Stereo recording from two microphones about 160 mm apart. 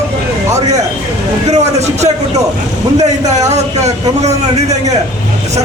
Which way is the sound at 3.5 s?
45° right (ahead or behind).